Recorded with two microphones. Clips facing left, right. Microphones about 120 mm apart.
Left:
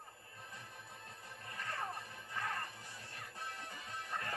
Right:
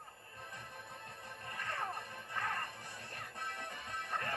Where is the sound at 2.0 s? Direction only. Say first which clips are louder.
Right 2 dB; 60° right (ahead or behind).